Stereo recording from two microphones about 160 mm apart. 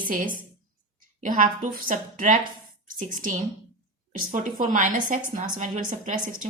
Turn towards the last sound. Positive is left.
turn(degrees=-55)  # may be behind; listen again after turning